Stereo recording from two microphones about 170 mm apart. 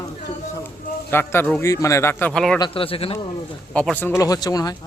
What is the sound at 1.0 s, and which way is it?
A man's voice, 15° left (ahead or behind).